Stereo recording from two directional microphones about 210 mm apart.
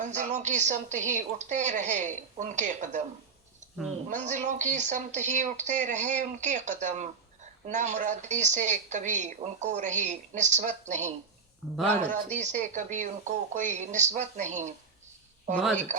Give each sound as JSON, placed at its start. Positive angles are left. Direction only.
{"t": 0.0, "sound": "a woman's voice", "side_deg": -35}
{"t": 4.1, "sound": "a woman's voice", "side_deg": -35}
{"t": 12.1, "sound": "a woman's voice", "side_deg": -35}
{"t": 15.6, "sound": "speech", "side_deg": 10}